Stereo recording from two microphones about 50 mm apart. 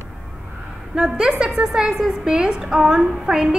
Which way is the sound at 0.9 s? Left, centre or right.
Centre.